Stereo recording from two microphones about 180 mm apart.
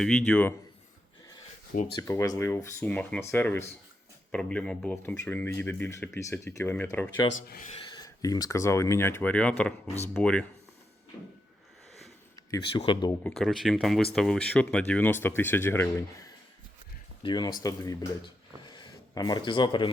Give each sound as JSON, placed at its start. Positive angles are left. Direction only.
{"t": 0.0, "sound": "speech", "side_deg": 5}
{"t": 2.0, "sound": "speech", "side_deg": 20}
{"t": 7.3, "sound": "speech", "side_deg": 60}
{"t": 7.6, "sound": "speech", "side_deg": 35}
{"t": 7.9, "sound": "speech", "side_deg": 20}
{"t": 12.4, "sound": "speech", "side_deg": 25}
{"t": 13.2, "sound": "speech", "side_deg": 0}